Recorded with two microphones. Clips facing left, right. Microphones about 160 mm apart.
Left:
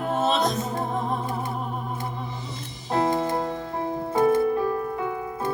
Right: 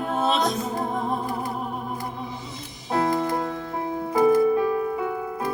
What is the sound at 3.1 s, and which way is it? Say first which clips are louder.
Music: even; 25° left (ahead or behind).